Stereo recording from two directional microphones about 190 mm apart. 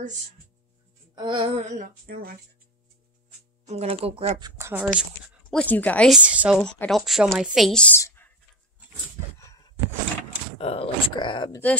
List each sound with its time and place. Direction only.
1.1 s a sound: 25° right (ahead or behind); by 2.3 s 50° right (ahead or behind)
3.6 s a sound: 30° right (ahead or behind)
4.5 s speech: 15° right (ahead or behind)
5.5 s speech: 5° left (ahead or behind)
6.6 s speech: 5° left (ahead or behind)
10.6 s speech: 30° left (ahead or behind)